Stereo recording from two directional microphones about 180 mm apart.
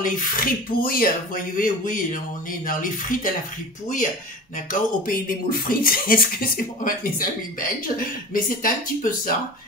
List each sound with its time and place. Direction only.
0.0 s speech: 50° left (ahead or behind)
4.6 s speech: 50° left (ahead or behind)